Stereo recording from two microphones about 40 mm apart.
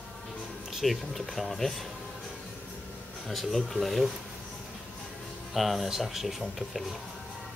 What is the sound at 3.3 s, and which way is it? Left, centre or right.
Speech, centre.